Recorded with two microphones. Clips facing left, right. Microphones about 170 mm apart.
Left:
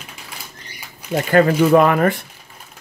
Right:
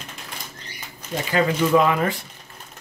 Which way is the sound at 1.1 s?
55° left (ahead or behind).